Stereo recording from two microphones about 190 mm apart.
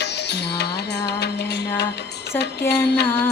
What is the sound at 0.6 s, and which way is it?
Music, 60° left (ahead or behind).